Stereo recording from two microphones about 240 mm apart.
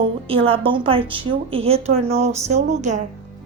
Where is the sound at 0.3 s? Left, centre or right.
Right.